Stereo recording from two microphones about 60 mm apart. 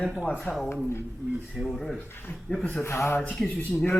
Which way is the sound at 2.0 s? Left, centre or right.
Left.